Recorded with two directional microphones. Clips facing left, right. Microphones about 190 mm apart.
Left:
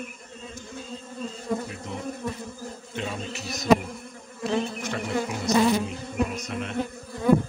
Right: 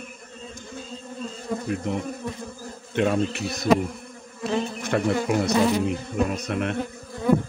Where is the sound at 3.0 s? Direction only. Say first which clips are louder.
Right 11 dB; 60° right (ahead or behind).